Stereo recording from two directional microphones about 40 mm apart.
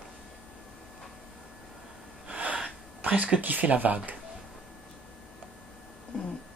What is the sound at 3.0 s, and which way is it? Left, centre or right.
Speech, right.